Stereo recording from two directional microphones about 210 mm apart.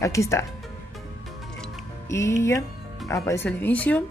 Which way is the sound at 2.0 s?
15° left (ahead or behind).